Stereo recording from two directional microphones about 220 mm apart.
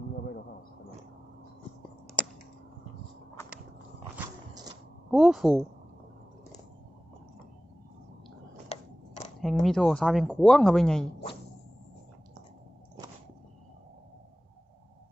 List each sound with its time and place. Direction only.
5.1 s speech: centre (ahead or behind)
8.7 s scissors: 30° left (ahead or behind)
9.4 s speech: centre (ahead or behind)